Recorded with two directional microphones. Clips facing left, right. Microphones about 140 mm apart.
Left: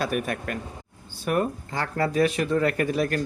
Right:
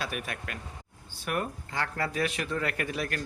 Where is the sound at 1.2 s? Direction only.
35° left (ahead or behind).